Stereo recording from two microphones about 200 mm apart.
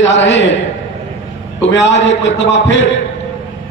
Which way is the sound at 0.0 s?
65° left (ahead or behind).